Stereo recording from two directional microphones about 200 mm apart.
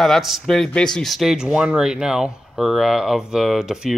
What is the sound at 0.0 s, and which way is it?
Speech, centre (ahead or behind).